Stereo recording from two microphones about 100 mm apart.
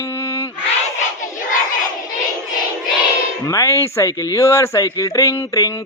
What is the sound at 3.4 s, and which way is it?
Speech, 30° left (ahead or behind).